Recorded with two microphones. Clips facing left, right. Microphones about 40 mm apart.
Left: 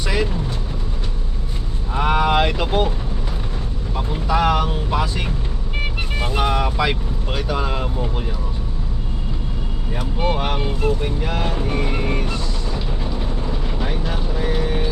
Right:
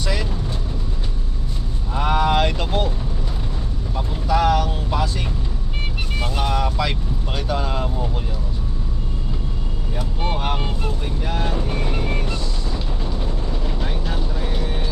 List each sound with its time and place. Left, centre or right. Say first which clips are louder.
0.0 s vehicle: left 4 dB; centre
1.9 s vehicle: left 1 dB; centre
3.9 s speech: even; centre
10.3 s vehicle: left 2 dB; left